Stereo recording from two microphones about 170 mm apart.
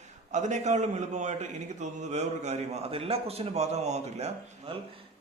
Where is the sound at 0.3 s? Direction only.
45° right (ahead or behind).